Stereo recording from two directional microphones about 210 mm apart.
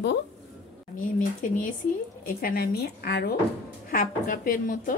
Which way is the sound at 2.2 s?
45° left (ahead or behind).